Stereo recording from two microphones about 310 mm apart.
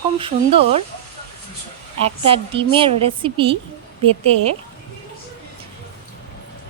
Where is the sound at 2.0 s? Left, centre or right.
Centre.